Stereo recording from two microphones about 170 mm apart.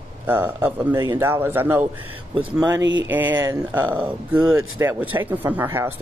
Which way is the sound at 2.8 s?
90° right.